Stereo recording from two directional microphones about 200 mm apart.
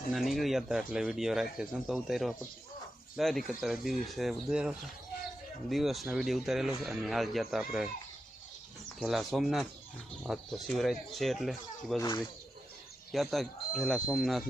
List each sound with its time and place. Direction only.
0.1 s speech: centre (ahead or behind)
9.0 s speech: centre (ahead or behind)
11.9 s speech: 20° left (ahead or behind)
13.1 s speech: centre (ahead or behind)